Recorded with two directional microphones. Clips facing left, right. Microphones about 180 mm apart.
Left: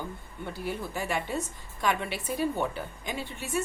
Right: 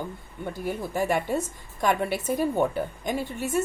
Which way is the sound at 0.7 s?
45° right (ahead or behind).